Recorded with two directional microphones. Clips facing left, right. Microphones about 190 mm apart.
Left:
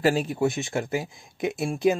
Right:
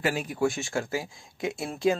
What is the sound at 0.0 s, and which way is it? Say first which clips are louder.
Speech: left 4 dB; 30° left (ahead or behind).